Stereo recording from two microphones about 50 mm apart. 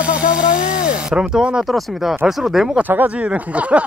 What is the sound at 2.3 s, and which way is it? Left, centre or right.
Speech, centre.